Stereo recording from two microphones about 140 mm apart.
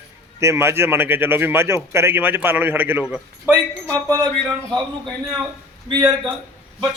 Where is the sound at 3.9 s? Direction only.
25° right (ahead or behind).